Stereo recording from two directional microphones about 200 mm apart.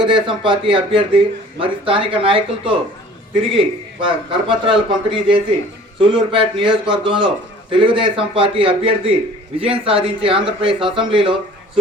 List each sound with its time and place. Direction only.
0.0 s a man's voice: 25° right (ahead or behind)